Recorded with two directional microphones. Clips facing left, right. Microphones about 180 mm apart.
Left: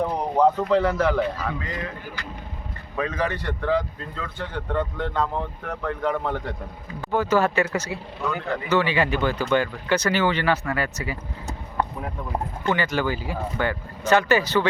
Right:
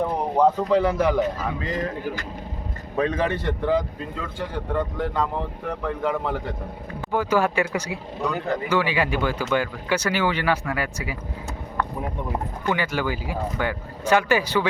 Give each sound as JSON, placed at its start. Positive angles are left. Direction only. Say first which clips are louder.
{"t": 0.0, "sound": "a sound", "louder": "even", "side_deg": -5}
{"t": 0.7, "sound": "speech", "louder": "right 1 dB", "side_deg": -10}
{"t": 1.2, "sound": "a man's voice", "louder": "right 1 dB", "side_deg": -40}
{"t": 2.9, "sound": "speech", "louder": "right 3 dB", "side_deg": -25}
{"t": 12.6, "sound": "speech", "louder": "left 1 dB", "side_deg": -10}